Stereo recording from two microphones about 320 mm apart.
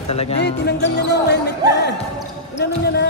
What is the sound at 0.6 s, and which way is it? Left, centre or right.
Speech, left.